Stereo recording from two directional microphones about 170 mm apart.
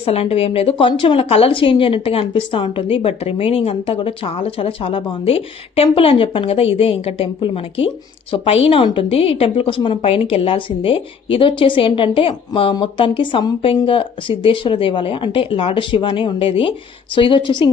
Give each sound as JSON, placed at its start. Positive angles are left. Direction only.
{"t": 0.0, "sound": "a woman's voice", "side_deg": 35}